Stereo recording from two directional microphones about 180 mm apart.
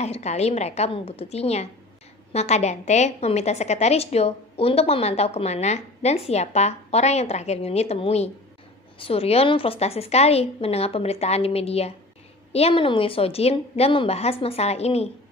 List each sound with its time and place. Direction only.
0.0 s a woman's voice: 35° left (ahead or behind)